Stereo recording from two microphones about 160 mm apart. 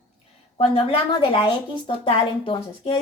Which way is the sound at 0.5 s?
35° left (ahead or behind).